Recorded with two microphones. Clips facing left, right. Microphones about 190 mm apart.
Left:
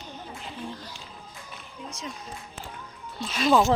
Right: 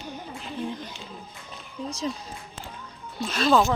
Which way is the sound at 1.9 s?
35° right (ahead or behind).